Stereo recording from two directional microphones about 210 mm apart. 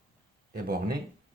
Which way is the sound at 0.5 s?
45° right (ahead or behind).